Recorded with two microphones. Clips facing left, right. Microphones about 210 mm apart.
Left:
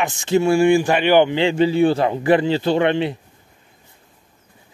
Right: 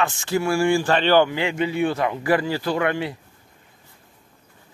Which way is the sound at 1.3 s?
30° left (ahead or behind).